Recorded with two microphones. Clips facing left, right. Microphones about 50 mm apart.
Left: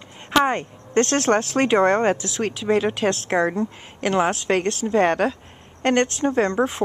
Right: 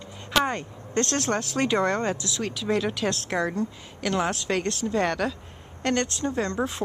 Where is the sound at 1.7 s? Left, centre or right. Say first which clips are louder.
Left 8 dB; left.